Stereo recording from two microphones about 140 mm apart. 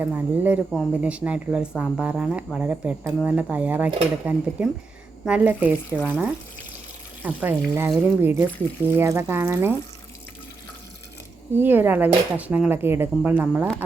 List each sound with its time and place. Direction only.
0.0 s speech: 10° right (ahead or behind)
11.5 s speech: 15° right (ahead or behind)